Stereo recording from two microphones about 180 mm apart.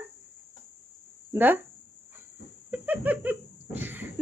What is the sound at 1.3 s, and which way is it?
Speech, 10° right (ahead or behind).